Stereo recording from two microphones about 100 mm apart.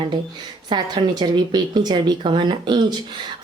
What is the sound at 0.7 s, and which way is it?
A woman's voice, 45° right (ahead or behind).